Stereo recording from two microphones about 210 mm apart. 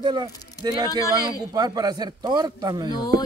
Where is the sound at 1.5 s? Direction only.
20° right (ahead or behind).